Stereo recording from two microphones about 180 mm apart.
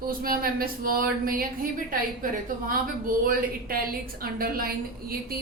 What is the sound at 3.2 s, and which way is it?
Speech, 50° right (ahead or behind).